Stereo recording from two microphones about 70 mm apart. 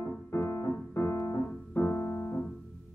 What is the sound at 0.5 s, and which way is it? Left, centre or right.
Piano, left.